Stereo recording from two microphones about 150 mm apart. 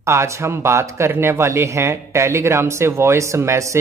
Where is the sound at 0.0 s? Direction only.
20° right (ahead or behind).